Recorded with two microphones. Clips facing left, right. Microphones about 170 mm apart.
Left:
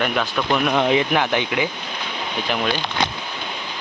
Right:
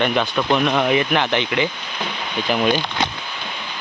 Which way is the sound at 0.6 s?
15° left (ahead or behind).